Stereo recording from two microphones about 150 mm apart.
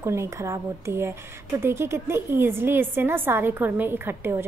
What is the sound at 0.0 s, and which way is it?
A woman's voice, 20° right (ahead or behind).